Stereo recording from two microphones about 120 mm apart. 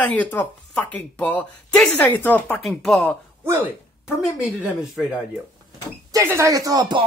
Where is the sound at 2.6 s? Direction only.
Centre (ahead or behind).